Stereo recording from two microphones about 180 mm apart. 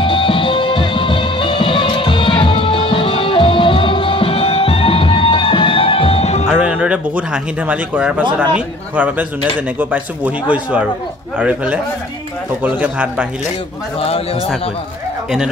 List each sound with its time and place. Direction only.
0.0 s music: 30° left (ahead or behind)
6.5 s speech: 5° right (ahead or behind)
13.9 s a man's voice: 30° left (ahead or behind)